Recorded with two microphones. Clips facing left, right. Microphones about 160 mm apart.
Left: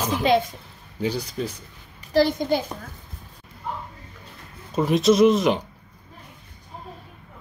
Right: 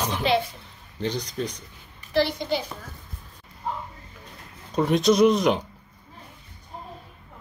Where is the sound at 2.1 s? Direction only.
45° left (ahead or behind).